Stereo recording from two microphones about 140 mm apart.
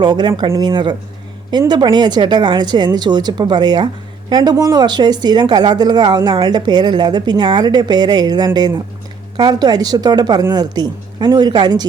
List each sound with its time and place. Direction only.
0.0 s speech: 30° right (ahead or behind)